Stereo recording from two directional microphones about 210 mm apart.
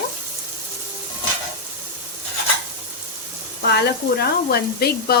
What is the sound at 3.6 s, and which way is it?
Speech, 50° left (ahead or behind).